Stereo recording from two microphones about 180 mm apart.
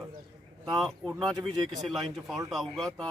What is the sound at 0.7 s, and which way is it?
Speech, centre (ahead or behind).